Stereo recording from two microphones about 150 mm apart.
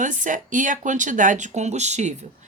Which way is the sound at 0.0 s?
60° right (ahead or behind).